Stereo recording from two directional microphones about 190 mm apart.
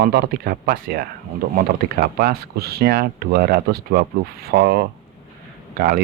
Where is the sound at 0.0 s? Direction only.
55° right (ahead or behind).